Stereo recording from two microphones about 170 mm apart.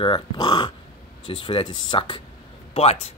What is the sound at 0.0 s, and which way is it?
Speech, 30° left (ahead or behind).